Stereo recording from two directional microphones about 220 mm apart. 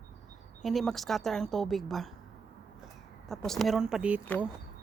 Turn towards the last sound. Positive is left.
turn(degrees=-5)  # may be behind; listen again after turning